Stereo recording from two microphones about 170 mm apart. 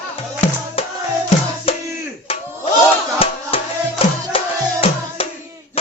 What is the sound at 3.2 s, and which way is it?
Music, 35° left (ahead or behind).